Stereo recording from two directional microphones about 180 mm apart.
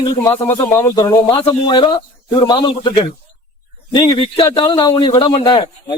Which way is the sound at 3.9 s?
25° left (ahead or behind).